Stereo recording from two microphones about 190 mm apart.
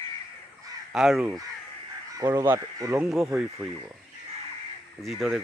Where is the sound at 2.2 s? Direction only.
15° right (ahead or behind).